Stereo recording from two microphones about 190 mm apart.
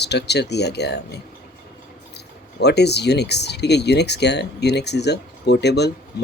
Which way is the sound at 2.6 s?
60° left (ahead or behind).